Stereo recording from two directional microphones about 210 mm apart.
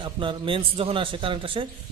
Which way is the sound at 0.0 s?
25° right (ahead or behind).